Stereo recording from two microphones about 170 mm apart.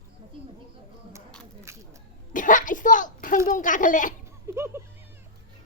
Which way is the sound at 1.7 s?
15° right (ahead or behind).